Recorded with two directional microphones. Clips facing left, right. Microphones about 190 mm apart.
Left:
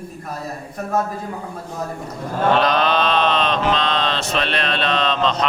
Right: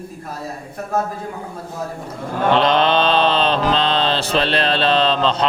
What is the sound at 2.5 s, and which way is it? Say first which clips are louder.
Mantra: right 4 dB; 25° right (ahead or behind).